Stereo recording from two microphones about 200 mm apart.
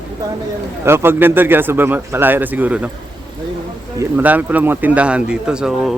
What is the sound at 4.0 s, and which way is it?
Speech, 10° right (ahead or behind).